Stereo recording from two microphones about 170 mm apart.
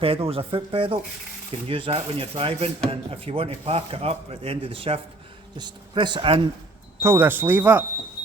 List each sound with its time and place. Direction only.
0.0 s a man's voice: 35° right (ahead or behind)
7.0 s speech: 15° right (ahead or behind)